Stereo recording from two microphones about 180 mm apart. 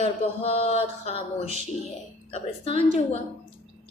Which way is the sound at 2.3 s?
35° left (ahead or behind).